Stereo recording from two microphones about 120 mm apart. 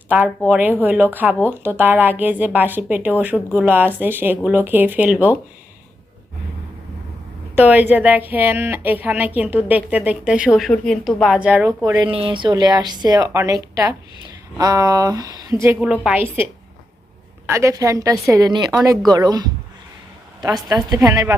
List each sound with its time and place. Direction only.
0.2 s a woman's voice: 10° right (ahead or behind)
7.5 s a woman's voice: 15° right (ahead or behind)
12.0 s a woman's voice: 45° right (ahead or behind); by 15.8 s 25° right (ahead or behind)
15.8 s a woman's voice: 10° right (ahead or behind); by 21.3 s 30° right (ahead or behind)